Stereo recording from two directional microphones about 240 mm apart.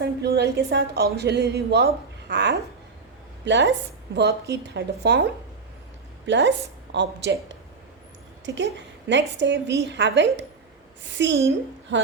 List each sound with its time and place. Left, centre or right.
0.0 s a woman's voice: right
6.2 s a woman's voice: right
11.9 s music: right